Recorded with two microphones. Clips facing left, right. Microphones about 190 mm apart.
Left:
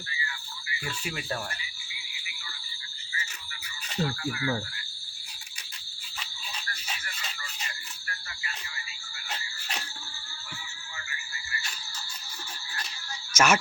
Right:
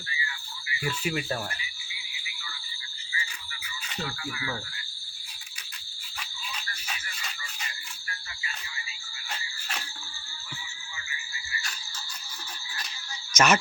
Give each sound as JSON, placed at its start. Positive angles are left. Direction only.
{"t": 1.0, "sound": "speech", "side_deg": -5}
{"t": 3.8, "sound": "speech", "side_deg": 45}
{"t": 13.3, "sound": "cricket", "side_deg": 10}